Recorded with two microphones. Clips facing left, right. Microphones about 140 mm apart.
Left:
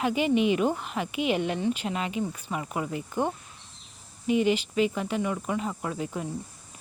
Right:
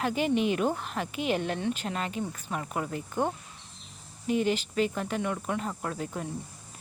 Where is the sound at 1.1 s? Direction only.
45° right (ahead or behind).